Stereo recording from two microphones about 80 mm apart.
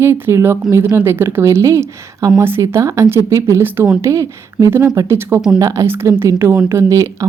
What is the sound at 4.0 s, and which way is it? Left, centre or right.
Speech, right.